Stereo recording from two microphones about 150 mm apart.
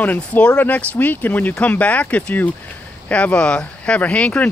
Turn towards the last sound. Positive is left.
turn(degrees=10)  # may be behind; listen again after turning